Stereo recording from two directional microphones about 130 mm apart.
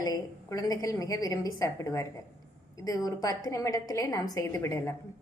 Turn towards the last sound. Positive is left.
turn(degrees=25)  # may be behind; listen again after turning